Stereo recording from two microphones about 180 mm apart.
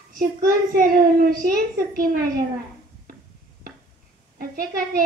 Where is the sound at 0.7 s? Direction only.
55° right (ahead or behind).